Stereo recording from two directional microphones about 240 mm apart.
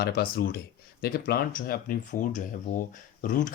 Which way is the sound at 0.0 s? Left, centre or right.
Left.